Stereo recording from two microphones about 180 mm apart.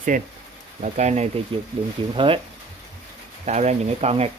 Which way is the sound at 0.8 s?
40° right (ahead or behind).